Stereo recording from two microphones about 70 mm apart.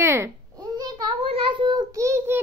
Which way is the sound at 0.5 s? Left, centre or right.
Right.